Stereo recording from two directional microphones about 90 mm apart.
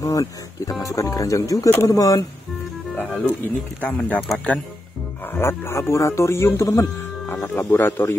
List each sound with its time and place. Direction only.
0.0 s speech: 40° left (ahead or behind)
3.0 s speech: 15° left (ahead or behind)
5.3 s speech: 25° left (ahead or behind)